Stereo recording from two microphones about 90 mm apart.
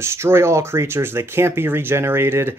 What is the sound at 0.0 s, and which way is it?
Speech, 30° right (ahead or behind).